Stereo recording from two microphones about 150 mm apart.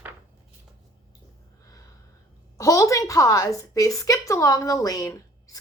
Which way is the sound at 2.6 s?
20° left (ahead or behind).